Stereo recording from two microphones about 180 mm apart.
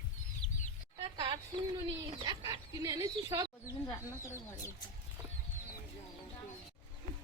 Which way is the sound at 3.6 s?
15° left (ahead or behind).